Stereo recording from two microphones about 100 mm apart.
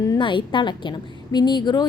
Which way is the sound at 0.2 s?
55° left (ahead or behind).